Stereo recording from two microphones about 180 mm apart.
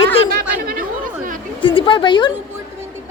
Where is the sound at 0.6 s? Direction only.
55° right (ahead or behind).